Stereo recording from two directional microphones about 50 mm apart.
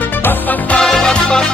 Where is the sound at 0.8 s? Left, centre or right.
Centre.